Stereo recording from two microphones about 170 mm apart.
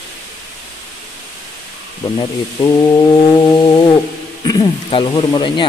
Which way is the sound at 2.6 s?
15° left (ahead or behind).